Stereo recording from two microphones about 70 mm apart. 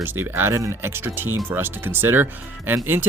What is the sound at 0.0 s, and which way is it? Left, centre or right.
Speech, right.